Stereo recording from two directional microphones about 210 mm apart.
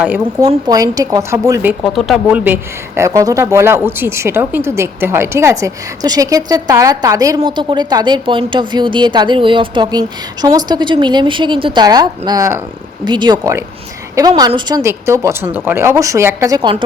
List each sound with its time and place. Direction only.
0.0 s speech: 10° right (ahead or behind)
1.8 s speech: centre (ahead or behind); by 16.7 s 15° right (ahead or behind)